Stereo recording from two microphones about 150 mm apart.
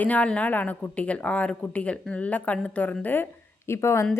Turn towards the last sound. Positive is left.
turn(degrees=20)  # may be behind; listen again after turning